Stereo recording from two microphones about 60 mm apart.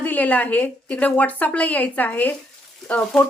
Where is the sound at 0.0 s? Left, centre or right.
Left.